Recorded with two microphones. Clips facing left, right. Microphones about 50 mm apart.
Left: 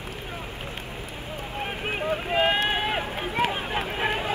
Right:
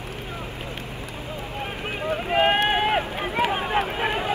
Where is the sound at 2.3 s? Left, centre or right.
Right.